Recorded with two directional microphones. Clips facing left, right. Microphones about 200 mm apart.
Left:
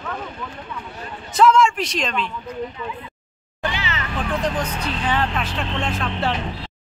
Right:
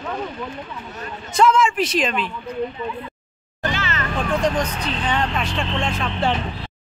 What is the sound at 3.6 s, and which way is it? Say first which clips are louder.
Music: right 1 dB; 50° right (ahead or behind).